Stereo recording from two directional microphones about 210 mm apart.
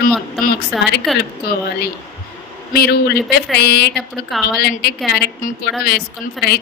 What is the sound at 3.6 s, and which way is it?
Speech, 55° left (ahead or behind).